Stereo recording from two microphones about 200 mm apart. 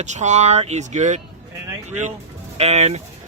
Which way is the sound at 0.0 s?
35° right (ahead or behind).